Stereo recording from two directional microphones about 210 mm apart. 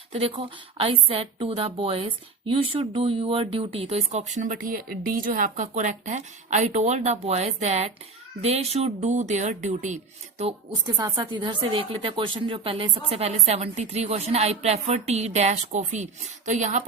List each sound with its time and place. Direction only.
0.1 s a woman's voice: 25° right (ahead or behind)
10.9 s a woman's voice: 15° right (ahead or behind); by 16.8 s 35° right (ahead or behind)